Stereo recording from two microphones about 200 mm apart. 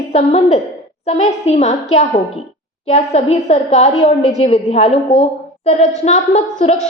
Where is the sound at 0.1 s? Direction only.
35° left (ahead or behind).